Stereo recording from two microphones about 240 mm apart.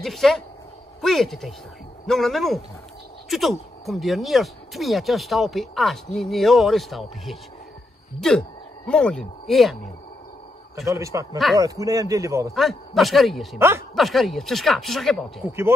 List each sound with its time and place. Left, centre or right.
0.0 s speech: centre
10.9 s speech: centre
12.5 s speech: centre
13.6 s speech: centre
13.9 s speech: centre
15.4 s speech: centre